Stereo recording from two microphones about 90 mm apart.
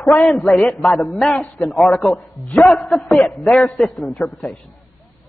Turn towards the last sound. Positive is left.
turn(degrees=0)  # may be behind; listen again after turning